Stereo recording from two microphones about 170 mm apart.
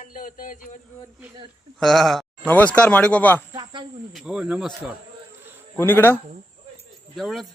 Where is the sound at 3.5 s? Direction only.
25° right (ahead or behind).